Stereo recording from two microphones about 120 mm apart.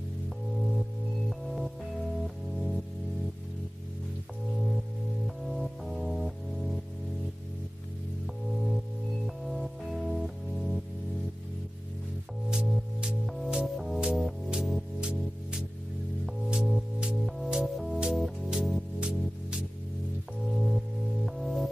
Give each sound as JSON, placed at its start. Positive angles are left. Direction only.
{"t": 2.2, "sound": "music", "side_deg": 0}
{"t": 5.2, "sound": "music", "side_deg": 0}
{"t": 8.6, "sound": "music", "side_deg": 0}
{"t": 12.4, "sound": "music", "side_deg": -5}